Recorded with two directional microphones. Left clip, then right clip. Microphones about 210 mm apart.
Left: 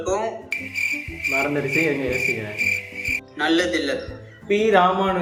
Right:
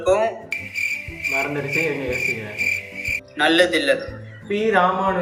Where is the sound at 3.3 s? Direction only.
30° right (ahead or behind).